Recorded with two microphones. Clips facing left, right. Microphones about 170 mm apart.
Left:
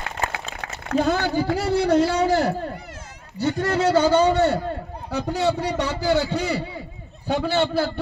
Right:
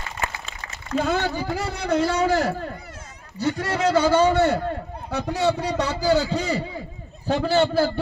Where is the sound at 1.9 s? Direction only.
30° left (ahead or behind).